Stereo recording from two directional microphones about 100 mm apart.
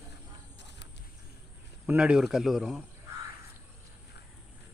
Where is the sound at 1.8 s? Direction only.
10° right (ahead or behind).